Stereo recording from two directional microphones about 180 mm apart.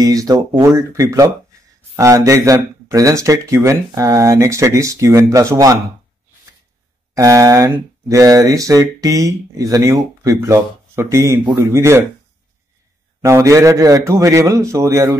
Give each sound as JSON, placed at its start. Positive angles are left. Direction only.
{"t": 0.0, "sound": "speech", "side_deg": -20}
{"t": 7.2, "sound": "speech", "side_deg": -15}
{"t": 13.2, "sound": "speech", "side_deg": -15}